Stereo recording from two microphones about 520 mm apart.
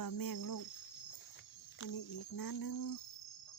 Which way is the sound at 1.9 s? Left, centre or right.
Left.